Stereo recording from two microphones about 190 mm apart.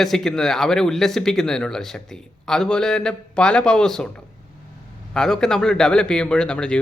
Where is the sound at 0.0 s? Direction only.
Centre (ahead or behind).